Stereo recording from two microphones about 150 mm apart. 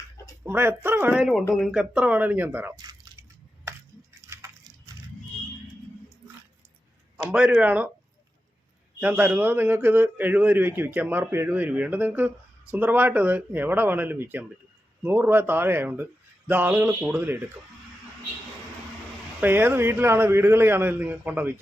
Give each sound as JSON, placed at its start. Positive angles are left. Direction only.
{"t": 0.4, "sound": "a man's voice", "side_deg": -15}
{"t": 2.7, "sound": "drip", "side_deg": -25}
{"t": 4.3, "sound": "a sound", "side_deg": -20}
{"t": 7.3, "sound": "a man's voice", "side_deg": -10}
{"t": 9.0, "sound": "a man's voice", "side_deg": -10}
{"t": 19.4, "sound": "a man's voice", "side_deg": -15}